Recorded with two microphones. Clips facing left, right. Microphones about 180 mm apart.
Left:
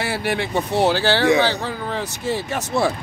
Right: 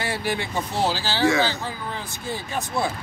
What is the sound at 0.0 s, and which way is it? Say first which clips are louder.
Speech: left 4 dB; 65° left (ahead or behind).